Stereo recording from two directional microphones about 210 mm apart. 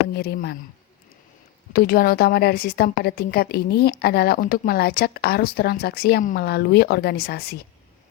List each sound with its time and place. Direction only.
0.1 s a woman's voice: 50° left (ahead or behind)
1.7 s a woman's voice: 45° left (ahead or behind)